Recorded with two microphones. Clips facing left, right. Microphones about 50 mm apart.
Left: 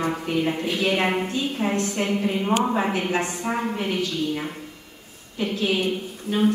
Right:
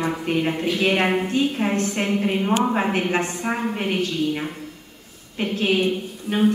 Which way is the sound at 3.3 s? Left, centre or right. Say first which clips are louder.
Right 1 dB; right.